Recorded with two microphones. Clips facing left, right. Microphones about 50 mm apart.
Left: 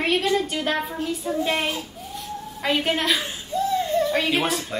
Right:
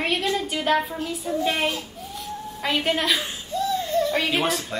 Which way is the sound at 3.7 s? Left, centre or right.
Left.